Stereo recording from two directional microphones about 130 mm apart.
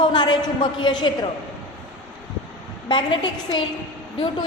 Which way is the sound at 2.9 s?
35° left (ahead or behind).